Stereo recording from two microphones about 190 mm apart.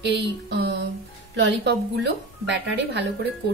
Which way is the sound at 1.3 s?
65° right (ahead or behind).